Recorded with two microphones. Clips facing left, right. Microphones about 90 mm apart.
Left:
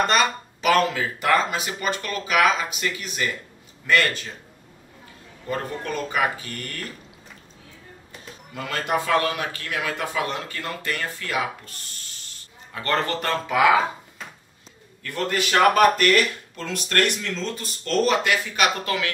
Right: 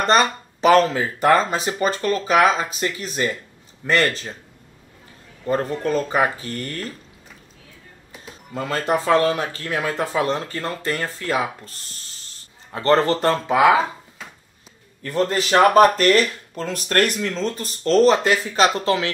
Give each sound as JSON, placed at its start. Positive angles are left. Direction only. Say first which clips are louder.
{"t": 0.0, "sound": "speech", "louder": "right 3 dB", "side_deg": -35}
{"t": 5.5, "sound": "speech", "louder": "right 7 dB", "side_deg": -35}
{"t": 8.5, "sound": "speech", "louder": "right 3 dB", "side_deg": -30}
{"t": 12.7, "sound": "speech", "louder": "right 7 dB", "side_deg": -30}
{"t": 15.0, "sound": "speech", "louder": "right 5 dB", "side_deg": -30}